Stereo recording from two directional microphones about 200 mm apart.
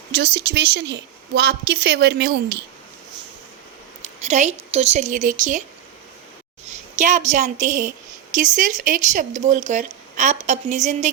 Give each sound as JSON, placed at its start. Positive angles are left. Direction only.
{"t": 0.1, "sound": "a woman's voice", "side_deg": -60}
{"t": 4.3, "sound": "speech", "side_deg": -35}
{"t": 6.7, "sound": "a woman's voice", "side_deg": -35}